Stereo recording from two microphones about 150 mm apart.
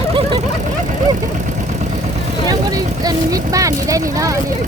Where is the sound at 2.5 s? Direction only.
25° right (ahead or behind).